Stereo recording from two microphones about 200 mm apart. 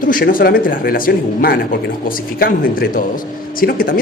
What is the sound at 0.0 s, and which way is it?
Speech, 45° left (ahead or behind).